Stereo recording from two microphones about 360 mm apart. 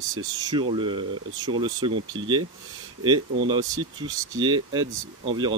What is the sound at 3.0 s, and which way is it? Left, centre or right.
Speech, centre.